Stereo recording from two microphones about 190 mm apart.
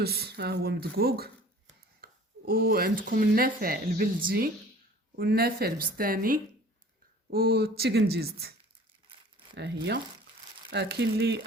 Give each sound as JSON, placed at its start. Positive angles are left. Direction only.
{"t": 0.0, "sound": "a woman's voice", "side_deg": -55}
{"t": 9.6, "sound": "speech", "side_deg": -65}